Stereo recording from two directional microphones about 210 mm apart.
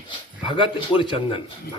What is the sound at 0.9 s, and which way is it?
Speech, 25° left (ahead or behind).